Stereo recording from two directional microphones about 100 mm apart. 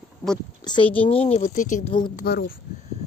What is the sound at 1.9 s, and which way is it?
Speech, 55° left (ahead or behind).